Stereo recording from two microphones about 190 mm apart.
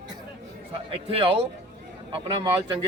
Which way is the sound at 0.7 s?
30° right (ahead or behind).